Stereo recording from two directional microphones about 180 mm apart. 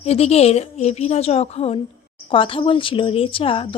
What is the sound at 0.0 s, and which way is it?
A woman's voice, 35° left (ahead or behind).